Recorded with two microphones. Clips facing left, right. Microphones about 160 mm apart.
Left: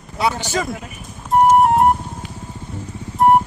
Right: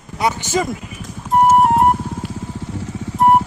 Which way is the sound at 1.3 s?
Centre (ahead or behind).